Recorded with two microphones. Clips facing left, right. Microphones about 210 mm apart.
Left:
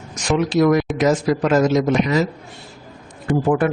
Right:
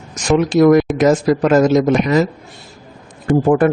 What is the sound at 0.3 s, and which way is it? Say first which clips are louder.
A man's voice: right 5 dB; 45° right (ahead or behind).